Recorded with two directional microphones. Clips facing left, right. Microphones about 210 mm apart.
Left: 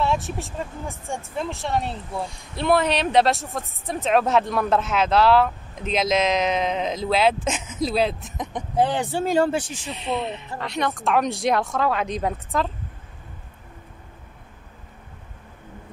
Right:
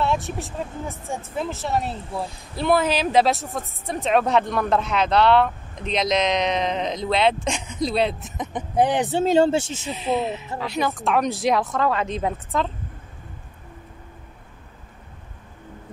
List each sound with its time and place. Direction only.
0.0 s speech: centre (ahead or behind)
8.7 s speech: 15° right (ahead or behind)
9.8 s speech: centre (ahead or behind)